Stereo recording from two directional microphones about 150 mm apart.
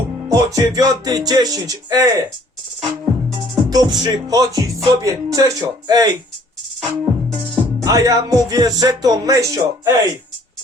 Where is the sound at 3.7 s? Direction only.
25° right (ahead or behind).